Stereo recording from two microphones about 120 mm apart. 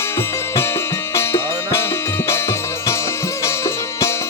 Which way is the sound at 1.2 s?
20° left (ahead or behind).